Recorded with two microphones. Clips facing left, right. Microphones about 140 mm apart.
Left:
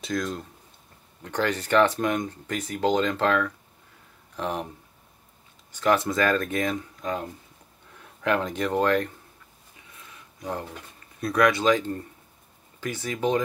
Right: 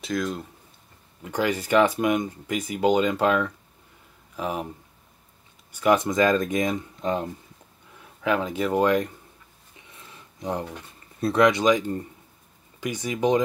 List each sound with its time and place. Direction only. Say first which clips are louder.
0.0 s speech: right 1 dB; centre (ahead or behind)
5.7 s speech: right 2 dB; 10° right (ahead or behind)
8.0 s speech: right 1 dB; 5° right (ahead or behind)
10.1 s a sound: right 3 dB; 20° right (ahead or behind)
11.1 s speech: right 2 dB; 30° right (ahead or behind)